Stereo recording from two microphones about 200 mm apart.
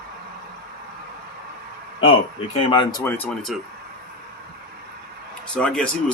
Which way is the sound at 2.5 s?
25° left (ahead or behind).